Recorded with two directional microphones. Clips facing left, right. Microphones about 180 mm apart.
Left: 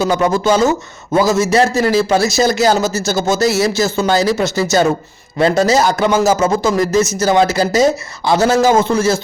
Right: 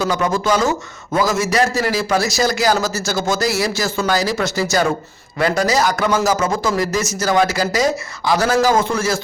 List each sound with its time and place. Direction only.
0.0 s a man's voice: 30° left (ahead or behind)